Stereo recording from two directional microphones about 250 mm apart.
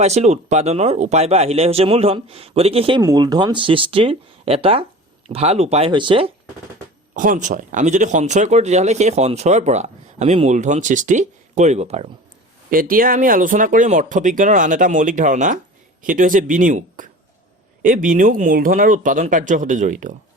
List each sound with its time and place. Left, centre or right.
0.0 s speech: right
7.1 s speech: right